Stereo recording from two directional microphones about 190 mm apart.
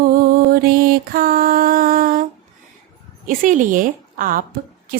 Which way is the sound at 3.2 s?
45° right (ahead or behind).